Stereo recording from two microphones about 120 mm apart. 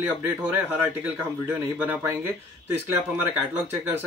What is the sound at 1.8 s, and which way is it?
Speech, 15° right (ahead or behind).